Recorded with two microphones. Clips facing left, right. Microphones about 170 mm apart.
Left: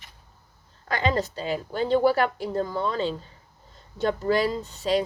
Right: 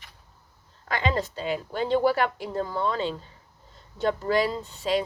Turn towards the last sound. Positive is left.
turn(degrees=40)  # may be behind; listen again after turning